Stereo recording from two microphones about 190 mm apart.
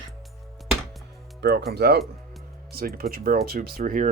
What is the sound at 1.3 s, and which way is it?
Speech, 60° right (ahead or behind).